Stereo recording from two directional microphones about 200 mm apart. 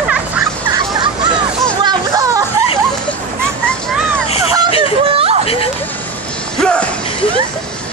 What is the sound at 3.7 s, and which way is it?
Vehicle, 5° left (ahead or behind).